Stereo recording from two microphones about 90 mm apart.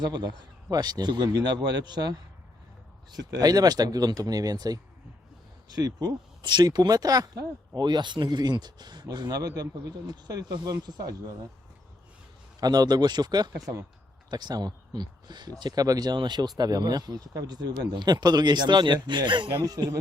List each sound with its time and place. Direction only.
0.0 s speech: 50° right (ahead or behind)
12.5 s speech: 45° right (ahead or behind); by 19.5 s 60° right (ahead or behind)
19.6 s speech: 45° right (ahead or behind)